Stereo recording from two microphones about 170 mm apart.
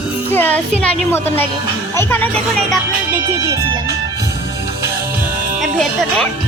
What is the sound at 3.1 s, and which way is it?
Speech, 15° right (ahead or behind).